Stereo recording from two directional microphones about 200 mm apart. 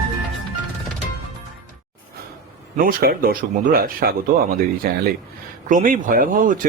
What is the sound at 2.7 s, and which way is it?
Speech, 50° right (ahead or behind).